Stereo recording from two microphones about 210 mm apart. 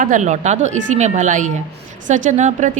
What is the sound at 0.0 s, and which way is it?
Speech, 35° right (ahead or behind).